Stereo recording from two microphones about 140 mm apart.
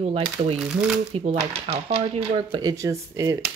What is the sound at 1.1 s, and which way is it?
Speech, 50° right (ahead or behind).